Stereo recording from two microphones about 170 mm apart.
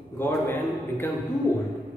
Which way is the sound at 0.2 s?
15° left (ahead or behind).